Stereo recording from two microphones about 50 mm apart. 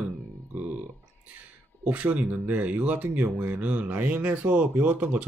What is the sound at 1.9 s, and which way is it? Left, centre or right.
Speech, right.